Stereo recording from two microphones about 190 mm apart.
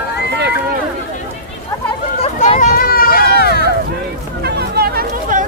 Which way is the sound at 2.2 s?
35° left (ahead or behind).